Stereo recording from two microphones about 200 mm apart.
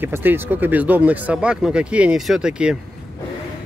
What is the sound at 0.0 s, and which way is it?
Speech, 10° right (ahead or behind).